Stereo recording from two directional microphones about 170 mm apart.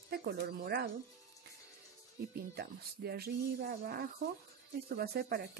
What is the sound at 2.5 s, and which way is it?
Speech, 70° right (ahead or behind).